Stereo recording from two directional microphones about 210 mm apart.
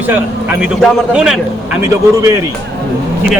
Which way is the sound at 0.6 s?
5° right (ahead or behind).